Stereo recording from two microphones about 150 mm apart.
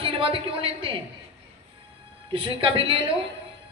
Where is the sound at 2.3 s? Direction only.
35° right (ahead or behind).